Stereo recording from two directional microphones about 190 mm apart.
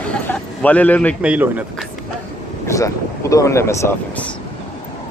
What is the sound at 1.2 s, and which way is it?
Speech, 5° right (ahead or behind).